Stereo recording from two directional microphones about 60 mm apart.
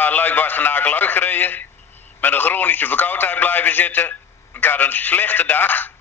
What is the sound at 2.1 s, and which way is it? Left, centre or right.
Speech, left.